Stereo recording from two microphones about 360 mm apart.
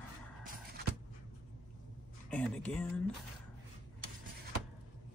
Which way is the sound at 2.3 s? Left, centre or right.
Centre.